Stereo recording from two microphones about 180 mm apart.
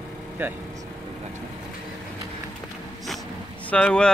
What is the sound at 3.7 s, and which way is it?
Speech, 5° left (ahead or behind).